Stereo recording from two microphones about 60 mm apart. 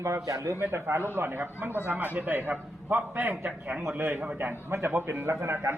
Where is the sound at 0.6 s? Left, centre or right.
Right.